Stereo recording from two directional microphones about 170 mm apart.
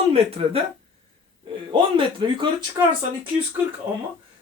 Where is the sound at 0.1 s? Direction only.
35° right (ahead or behind).